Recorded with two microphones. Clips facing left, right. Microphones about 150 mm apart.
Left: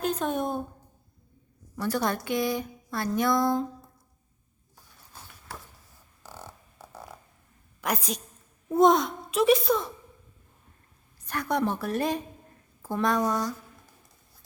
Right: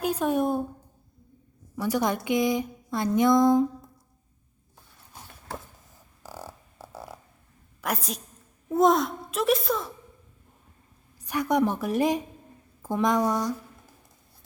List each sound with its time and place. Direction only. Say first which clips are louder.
0.0 s a sound: right 3 dB; 10° right (ahead or behind)
1.7 s speech: right 2 dB; 15° right (ahead or behind)
5.1 s a sound: right 2 dB; 20° right (ahead or behind)
6.2 s beatboxing: right 4 dB; 10° right (ahead or behind)
7.8 s a woman's voice: left 1 dB; centre (ahead or behind)
11.2 s speech: right 4 dB; 15° right (ahead or behind)